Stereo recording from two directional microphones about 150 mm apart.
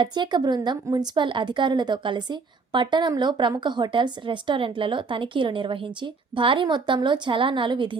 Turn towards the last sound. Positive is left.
turn(degrees=-35)  # may be behind; listen again after turning